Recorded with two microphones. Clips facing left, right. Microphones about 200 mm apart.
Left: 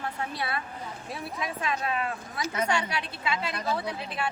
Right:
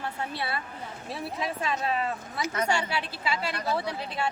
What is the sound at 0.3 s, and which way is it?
A woman's voice, 30° right (ahead or behind).